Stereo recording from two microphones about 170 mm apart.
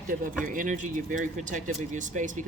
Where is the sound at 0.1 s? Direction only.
50° right (ahead or behind).